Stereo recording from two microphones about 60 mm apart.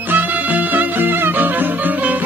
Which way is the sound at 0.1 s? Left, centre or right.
Right.